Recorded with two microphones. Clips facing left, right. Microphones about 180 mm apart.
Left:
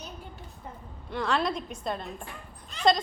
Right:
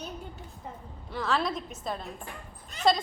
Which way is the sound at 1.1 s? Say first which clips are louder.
Left 1 dB; centre (ahead or behind).